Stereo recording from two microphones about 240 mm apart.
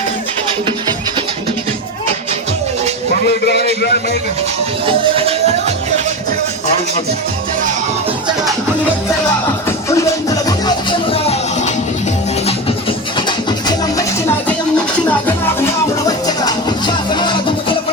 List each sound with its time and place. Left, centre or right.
4.9 s music: right
9.6 s music: centre
13.1 s music: centre